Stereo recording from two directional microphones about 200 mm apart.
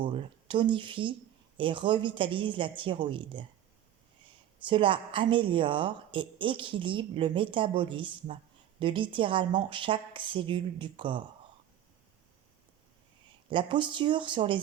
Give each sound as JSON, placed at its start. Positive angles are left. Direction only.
{"t": 0.0, "sound": "a woman's voice", "side_deg": -25}
{"t": 4.6, "sound": "a woman's voice", "side_deg": -25}
{"t": 13.5, "sound": "a woman's voice", "side_deg": -25}